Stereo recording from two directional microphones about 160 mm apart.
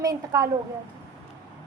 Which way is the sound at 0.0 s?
20° right (ahead or behind).